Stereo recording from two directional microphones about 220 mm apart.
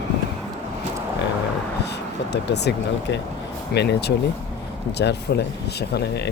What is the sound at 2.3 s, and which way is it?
Speech, 50° left (ahead or behind).